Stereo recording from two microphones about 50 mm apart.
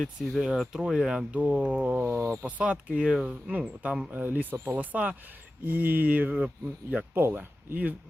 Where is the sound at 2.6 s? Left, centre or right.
Right.